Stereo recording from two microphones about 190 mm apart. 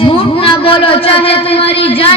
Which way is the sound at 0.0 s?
30° left (ahead or behind).